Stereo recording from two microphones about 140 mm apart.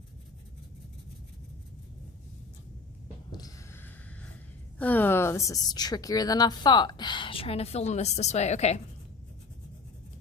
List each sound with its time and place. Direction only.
3.3 s snort: 25° left (ahead or behind)
4.8 s a woman's voice: 10° left (ahead or behind); by 8.8 s 55° left (ahead or behind)